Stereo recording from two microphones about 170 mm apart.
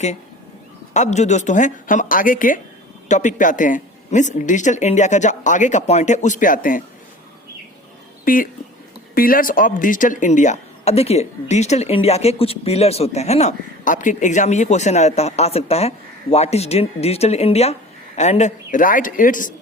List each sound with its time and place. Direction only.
0.9 s speech: 45° left (ahead or behind)
8.2 s a woman's voice: 55° left (ahead or behind)